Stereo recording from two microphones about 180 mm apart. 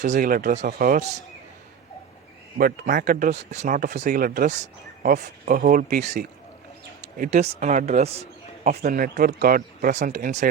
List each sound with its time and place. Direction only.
0.0 s speech: 45° right (ahead or behind)
2.6 s speech: 55° right (ahead or behind)